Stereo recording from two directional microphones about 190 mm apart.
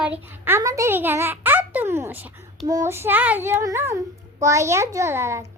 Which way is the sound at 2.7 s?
15° right (ahead or behind).